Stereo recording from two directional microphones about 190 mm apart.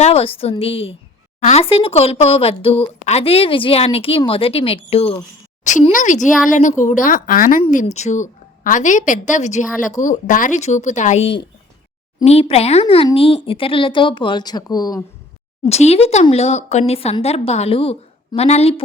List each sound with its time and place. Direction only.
0.0 s a woman's voice: 30° left (ahead or behind)
15.6 s speech: 35° left (ahead or behind)